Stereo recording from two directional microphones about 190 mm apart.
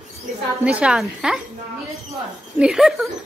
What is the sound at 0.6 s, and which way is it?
Speech, 5° right (ahead or behind).